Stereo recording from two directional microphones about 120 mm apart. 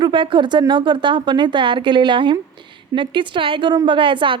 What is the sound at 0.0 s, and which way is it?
A woman's voice, 45° right (ahead or behind).